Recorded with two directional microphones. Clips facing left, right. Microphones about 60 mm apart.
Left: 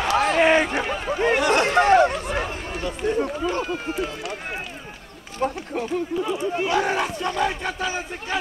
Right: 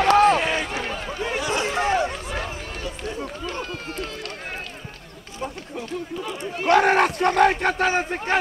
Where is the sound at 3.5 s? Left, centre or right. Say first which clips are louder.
Left 5 dB; centre.